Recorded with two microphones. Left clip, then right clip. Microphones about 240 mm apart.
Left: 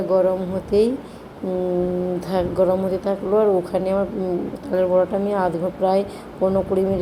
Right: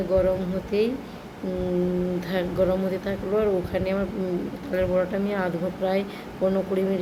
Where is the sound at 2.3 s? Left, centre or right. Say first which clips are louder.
Left 5 dB; centre.